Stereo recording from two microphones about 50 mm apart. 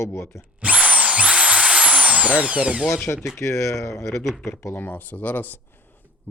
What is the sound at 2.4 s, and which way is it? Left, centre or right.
Speech, right.